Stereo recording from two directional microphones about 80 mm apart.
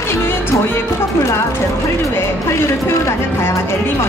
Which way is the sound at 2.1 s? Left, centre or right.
Left.